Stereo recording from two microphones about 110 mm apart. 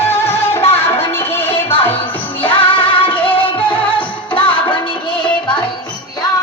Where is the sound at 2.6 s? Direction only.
50° left (ahead or behind).